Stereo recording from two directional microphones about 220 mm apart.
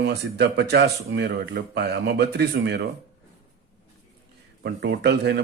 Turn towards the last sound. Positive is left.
turn(degrees=-50)  # may be behind; listen again after turning